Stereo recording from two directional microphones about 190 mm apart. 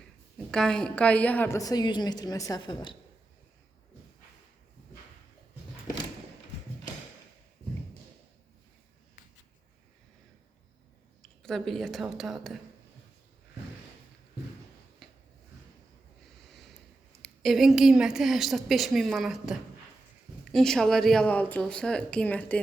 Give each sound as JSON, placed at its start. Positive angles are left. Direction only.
{"t": 0.5, "sound": "a woman's voice", "side_deg": 5}
{"t": 11.2, "sound": "speech", "side_deg": 0}
{"t": 17.2, "sound": "a woman's voice", "side_deg": 0}